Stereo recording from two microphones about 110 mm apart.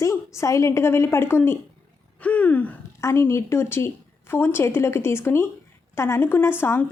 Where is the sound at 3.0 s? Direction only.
25° left (ahead or behind).